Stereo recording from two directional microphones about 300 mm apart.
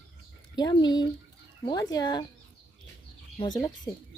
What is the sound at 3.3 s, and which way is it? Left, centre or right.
Speech, centre.